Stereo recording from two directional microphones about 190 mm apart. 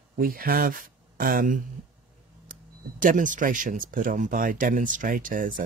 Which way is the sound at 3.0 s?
45° right (ahead or behind).